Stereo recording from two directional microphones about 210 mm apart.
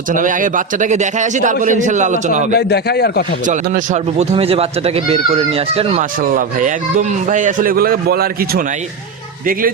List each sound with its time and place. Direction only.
0.1 s a man's voice: 40° right (ahead or behind)
2.5 s speech: 50° left (ahead or behind)
3.4 s a man's voice: 40° right (ahead or behind)